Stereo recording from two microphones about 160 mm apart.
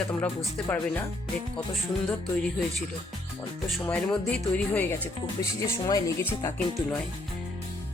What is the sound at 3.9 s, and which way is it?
Speech, 5° left (ahead or behind).